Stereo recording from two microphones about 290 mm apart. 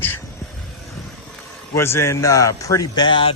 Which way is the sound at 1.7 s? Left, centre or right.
Centre.